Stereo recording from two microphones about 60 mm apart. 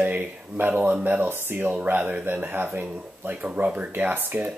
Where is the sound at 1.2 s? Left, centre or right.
Right.